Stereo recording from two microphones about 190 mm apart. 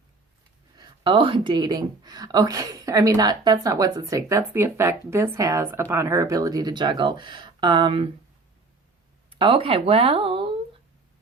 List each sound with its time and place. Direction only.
0.8 s speech: 25° right (ahead or behind)
9.3 s speech: 25° right (ahead or behind)